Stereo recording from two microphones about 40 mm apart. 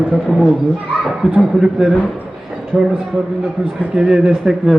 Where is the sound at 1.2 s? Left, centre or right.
Right.